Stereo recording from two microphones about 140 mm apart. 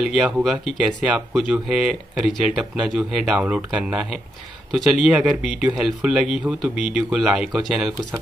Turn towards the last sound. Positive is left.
turn(degrees=0)  # may be behind; listen again after turning